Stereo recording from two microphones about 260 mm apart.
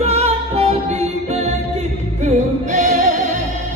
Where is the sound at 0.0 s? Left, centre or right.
Right.